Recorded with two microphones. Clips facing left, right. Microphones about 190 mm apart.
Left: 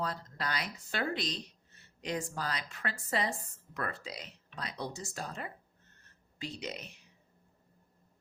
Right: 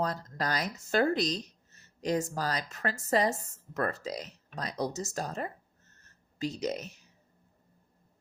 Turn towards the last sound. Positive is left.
turn(degrees=-40)  # may be behind; listen again after turning